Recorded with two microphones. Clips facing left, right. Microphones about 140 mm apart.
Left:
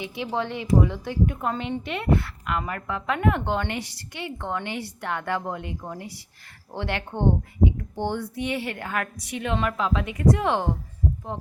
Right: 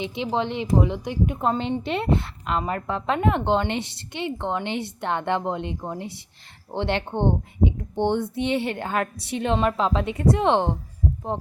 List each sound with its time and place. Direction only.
0.0 s speech: 20° right (ahead or behind)